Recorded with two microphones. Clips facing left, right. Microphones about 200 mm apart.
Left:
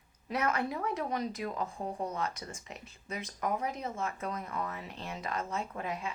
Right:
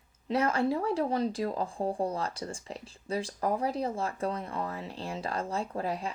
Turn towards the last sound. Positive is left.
turn(degrees=-35)  # may be behind; listen again after turning